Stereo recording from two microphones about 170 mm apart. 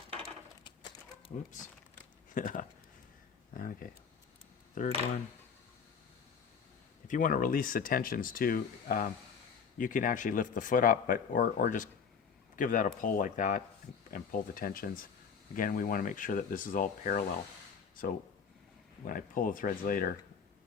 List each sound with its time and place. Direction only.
0.6 s a sound: 25° left (ahead or behind)
2.3 s speech: 50° left (ahead or behind)
7.1 s speech: 50° left (ahead or behind)
19.0 s speech: 55° left (ahead or behind)